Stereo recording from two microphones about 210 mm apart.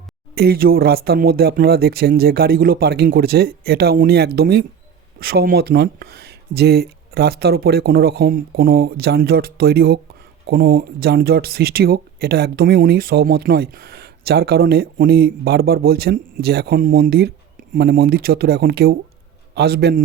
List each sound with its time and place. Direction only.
0.3 s speech: 45° right (ahead or behind)